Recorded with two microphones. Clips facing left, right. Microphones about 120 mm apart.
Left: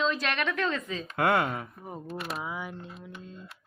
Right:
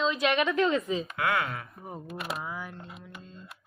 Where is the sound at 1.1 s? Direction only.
35° left (ahead or behind).